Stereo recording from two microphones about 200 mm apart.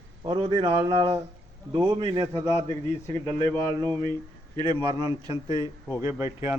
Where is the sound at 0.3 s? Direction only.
25° right (ahead or behind).